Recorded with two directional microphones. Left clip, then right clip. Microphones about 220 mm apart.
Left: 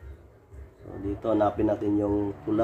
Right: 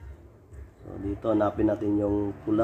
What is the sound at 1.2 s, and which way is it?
Speech, 20° right (ahead or behind).